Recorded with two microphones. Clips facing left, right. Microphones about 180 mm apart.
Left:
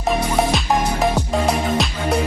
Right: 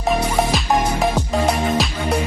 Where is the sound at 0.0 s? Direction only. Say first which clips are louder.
Even; centre (ahead or behind).